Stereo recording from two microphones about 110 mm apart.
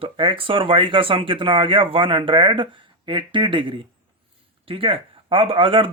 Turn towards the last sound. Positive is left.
turn(degrees=-50)  # may be behind; listen again after turning